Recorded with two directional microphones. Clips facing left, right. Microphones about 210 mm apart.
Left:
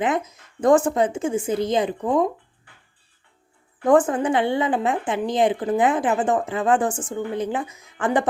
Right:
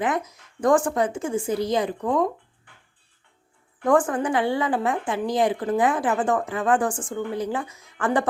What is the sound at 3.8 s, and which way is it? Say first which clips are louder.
A woman's voice: left 3 dB; 20° left (ahead or behind).